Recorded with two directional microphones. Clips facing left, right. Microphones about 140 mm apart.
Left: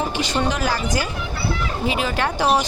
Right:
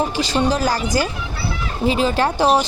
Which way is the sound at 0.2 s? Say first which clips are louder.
Right 3 dB; 35° right (ahead or behind).